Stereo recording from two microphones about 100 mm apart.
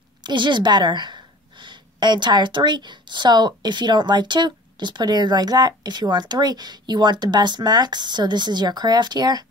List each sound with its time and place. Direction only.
0.2 s a woman's voice: 50° right (ahead or behind)